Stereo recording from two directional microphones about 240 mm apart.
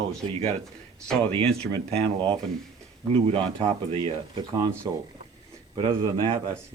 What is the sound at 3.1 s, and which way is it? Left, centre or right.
Speech, right.